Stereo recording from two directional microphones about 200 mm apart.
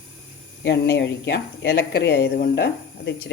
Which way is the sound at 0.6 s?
55° left (ahead or behind).